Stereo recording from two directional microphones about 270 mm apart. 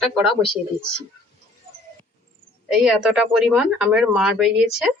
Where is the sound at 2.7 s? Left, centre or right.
Centre.